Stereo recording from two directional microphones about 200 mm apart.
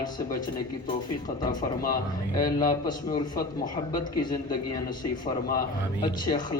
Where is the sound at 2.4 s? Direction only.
20° left (ahead or behind).